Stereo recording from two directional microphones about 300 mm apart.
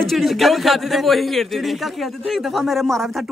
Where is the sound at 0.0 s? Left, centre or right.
Centre.